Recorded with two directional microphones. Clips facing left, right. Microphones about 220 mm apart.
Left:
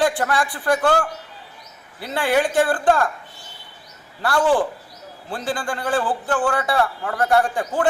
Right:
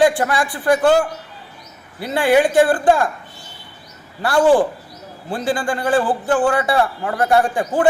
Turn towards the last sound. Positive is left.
turn(degrees=-10)  # may be behind; listen again after turning